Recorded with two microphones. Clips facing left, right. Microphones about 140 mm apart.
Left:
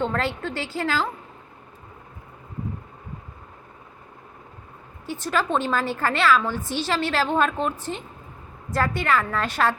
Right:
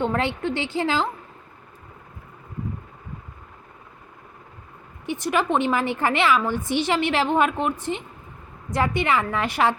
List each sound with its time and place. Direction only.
0.0 s a woman's voice: 15° right (ahead or behind)
5.0 s a woman's voice: 15° right (ahead or behind)